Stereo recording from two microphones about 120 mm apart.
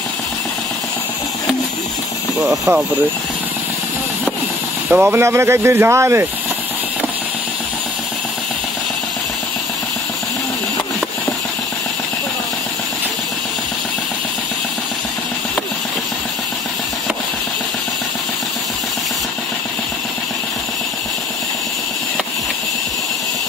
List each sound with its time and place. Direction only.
4.9 s speech: 20° right (ahead or behind)